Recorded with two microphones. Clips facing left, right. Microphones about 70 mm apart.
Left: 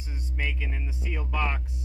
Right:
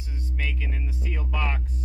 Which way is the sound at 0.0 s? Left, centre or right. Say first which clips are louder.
Even; centre.